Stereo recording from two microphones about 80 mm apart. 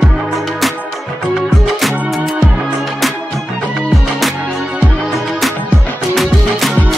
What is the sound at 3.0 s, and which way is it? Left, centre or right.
Music, centre.